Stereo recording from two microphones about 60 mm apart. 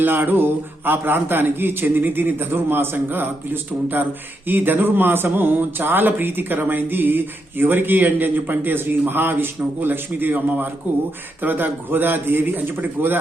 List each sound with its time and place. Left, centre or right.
0.0 s speech: right